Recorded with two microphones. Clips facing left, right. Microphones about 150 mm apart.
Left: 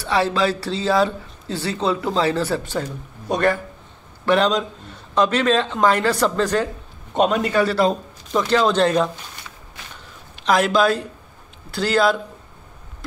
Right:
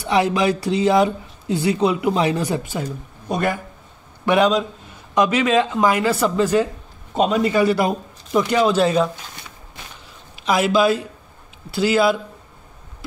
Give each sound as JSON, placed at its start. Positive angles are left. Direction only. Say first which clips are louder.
{"t": 0.0, "sound": "a man's voice", "louder": "right 2 dB", "side_deg": -15}
{"t": 10.4, "sound": "a man's voice", "louder": "even", "side_deg": -5}